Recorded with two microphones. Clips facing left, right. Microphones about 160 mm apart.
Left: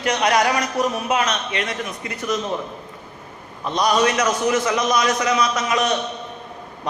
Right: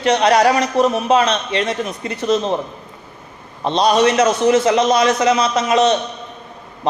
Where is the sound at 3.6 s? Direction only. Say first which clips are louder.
Right 5 dB; 30° right (ahead or behind).